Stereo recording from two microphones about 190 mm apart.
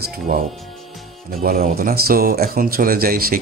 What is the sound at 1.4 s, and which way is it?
Speech, 45° right (ahead or behind).